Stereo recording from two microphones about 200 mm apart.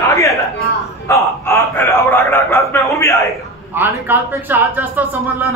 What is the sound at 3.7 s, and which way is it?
Speech, 10° right (ahead or behind).